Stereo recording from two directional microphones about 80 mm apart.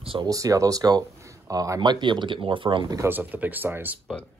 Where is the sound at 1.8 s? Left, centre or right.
Right.